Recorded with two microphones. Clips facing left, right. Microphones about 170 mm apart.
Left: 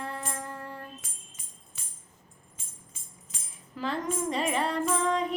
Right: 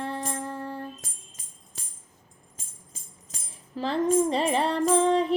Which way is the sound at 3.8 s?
30° right (ahead or behind).